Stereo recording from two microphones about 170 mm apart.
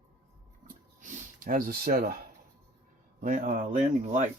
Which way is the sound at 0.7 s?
50° right (ahead or behind).